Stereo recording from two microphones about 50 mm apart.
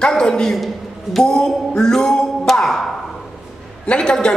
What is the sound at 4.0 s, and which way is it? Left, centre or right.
Speech, centre.